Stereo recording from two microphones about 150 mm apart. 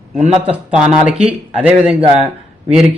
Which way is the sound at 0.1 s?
50° right (ahead or behind).